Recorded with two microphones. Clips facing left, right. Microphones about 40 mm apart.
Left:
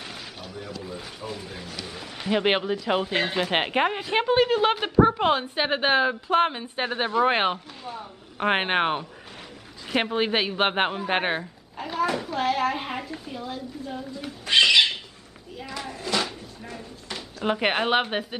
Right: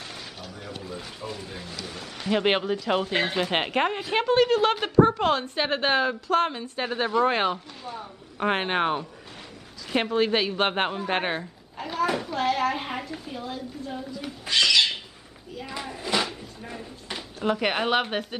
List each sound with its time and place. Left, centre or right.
0.8 s a woman's voice: centre; by 7.5 s left
7.5 s speech: centre
8.5 s speech: left
10.1 s a woman's voice: centre
11.8 s a woman's voice: centre
14.5 s cat: left
15.6 s a sound: centre
17.5 s speech: left